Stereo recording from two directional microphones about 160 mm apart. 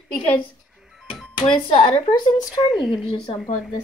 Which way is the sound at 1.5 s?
30° left (ahead or behind).